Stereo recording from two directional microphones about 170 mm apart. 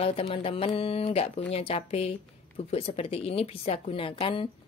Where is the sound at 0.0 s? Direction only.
35° left (ahead or behind).